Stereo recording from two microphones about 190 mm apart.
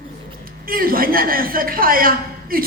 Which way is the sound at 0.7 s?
50° right (ahead or behind).